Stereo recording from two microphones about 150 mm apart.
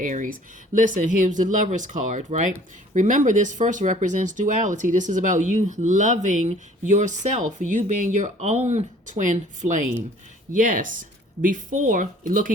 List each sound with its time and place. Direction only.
0.0 s speech: 60° right (ahead or behind)